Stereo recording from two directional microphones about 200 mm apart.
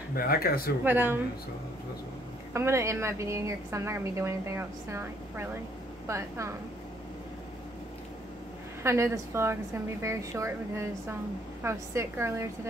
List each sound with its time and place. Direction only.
0.1 s speech: 50° left (ahead or behind)
0.8 s a woman's voice: 10° right (ahead or behind)
2.5 s a woman's voice: 15° right (ahead or behind)
8.8 s a woman's voice: 15° right (ahead or behind)